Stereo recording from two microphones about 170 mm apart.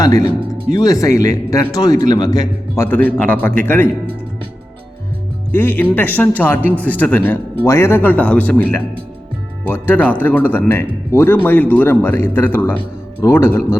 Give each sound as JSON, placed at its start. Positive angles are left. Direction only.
{"t": 0.8, "sound": "a man's voice", "side_deg": 20}
{"t": 5.5, "sound": "speech", "side_deg": 10}
{"t": 6.6, "sound": "speech", "side_deg": -10}
{"t": 6.8, "sound": "speech", "side_deg": 10}